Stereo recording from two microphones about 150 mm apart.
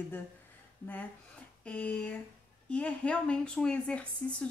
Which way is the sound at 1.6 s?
10° left (ahead or behind).